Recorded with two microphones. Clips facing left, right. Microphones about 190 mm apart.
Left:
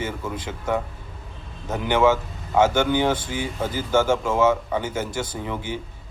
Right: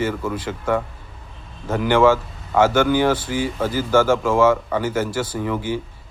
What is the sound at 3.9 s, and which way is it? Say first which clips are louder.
A man's voice: right 3 dB; 25° left (ahead or behind).